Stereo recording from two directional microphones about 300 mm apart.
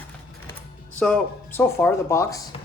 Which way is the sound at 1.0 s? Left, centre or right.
Centre.